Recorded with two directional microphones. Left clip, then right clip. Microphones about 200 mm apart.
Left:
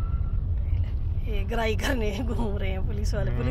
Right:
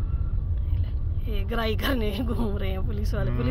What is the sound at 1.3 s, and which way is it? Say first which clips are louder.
A woman's voice: left 1 dB; 10° right (ahead or behind).